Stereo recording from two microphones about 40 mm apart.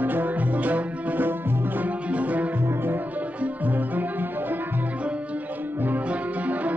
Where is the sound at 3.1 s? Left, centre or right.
Right.